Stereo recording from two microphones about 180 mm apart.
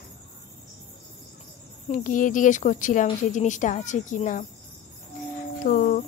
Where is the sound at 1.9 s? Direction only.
45° left (ahead or behind).